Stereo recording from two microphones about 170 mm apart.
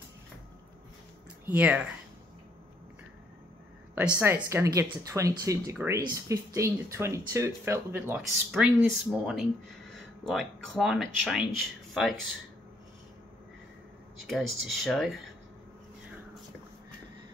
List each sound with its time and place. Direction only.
1.4 s speech: 10° right (ahead or behind)
3.9 s speech: 10° right (ahead or behind)
8.5 s speech: 5° right (ahead or behind)
14.2 s speech: centre (ahead or behind)